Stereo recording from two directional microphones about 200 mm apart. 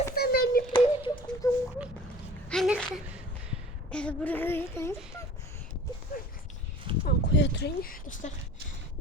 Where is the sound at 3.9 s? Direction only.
5° left (ahead or behind).